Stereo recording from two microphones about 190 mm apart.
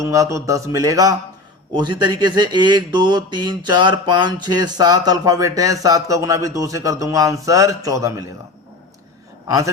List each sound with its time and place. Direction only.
0.0 s a sound: 15° right (ahead or behind)
1.7 s speech: 25° right (ahead or behind)
9.5 s speech: 20° right (ahead or behind)